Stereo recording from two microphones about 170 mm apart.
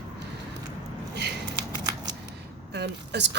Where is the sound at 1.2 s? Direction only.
80° right.